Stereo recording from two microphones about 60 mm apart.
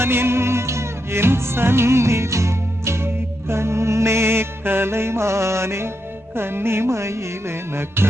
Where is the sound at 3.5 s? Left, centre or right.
Right.